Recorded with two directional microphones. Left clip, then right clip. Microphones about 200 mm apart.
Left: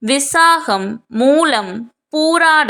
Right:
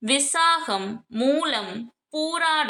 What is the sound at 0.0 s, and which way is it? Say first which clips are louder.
A woman's voice: left 9 dB; 35° left (ahead or behind).